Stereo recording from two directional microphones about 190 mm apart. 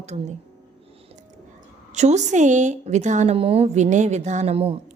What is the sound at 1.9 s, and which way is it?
Speech, 35° right (ahead or behind).